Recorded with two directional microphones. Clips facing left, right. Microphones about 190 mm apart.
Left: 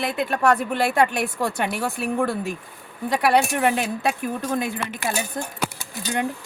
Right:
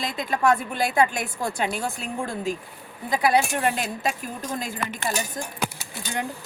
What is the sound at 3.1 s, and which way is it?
Speech, 70° left (ahead or behind).